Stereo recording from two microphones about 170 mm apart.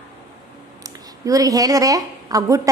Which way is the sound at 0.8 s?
20° right (ahead or behind).